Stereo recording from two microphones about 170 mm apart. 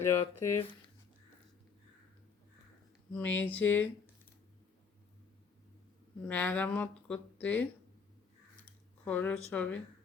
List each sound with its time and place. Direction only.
0.0 s speech: 15° left (ahead or behind)
3.1 s speech: 10° left (ahead or behind)
6.2 s speech: 10° left (ahead or behind)
9.0 s speech: 10° left (ahead or behind)